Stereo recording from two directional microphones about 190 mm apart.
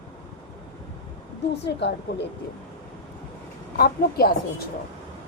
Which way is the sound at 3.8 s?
55° left (ahead or behind).